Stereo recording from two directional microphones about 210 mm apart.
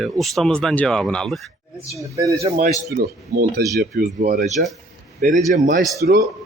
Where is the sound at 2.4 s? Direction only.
35° right (ahead or behind).